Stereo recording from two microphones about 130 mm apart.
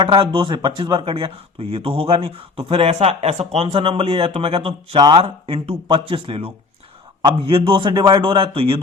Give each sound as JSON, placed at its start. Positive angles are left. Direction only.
{"t": 0.0, "sound": "speech", "side_deg": -40}
{"t": 5.2, "sound": "a man's voice", "side_deg": -45}